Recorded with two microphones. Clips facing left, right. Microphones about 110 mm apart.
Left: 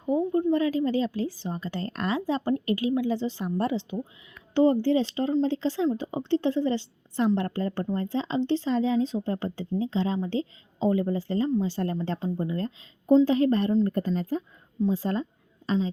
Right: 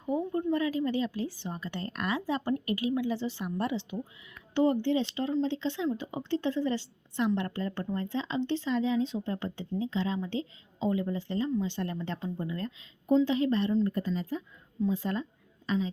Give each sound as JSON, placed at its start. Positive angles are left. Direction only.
{"t": 0.0, "sound": "a woman's voice", "side_deg": 20}